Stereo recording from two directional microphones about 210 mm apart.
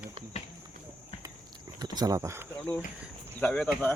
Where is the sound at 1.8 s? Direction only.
20° right (ahead or behind).